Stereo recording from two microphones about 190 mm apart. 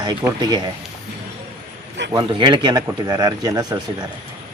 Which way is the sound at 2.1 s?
25° right (ahead or behind).